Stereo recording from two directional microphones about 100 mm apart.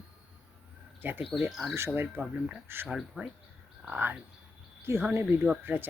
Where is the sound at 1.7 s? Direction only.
25° right (ahead or behind).